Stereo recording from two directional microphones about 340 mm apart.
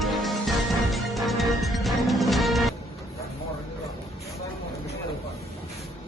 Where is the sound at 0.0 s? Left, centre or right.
Centre.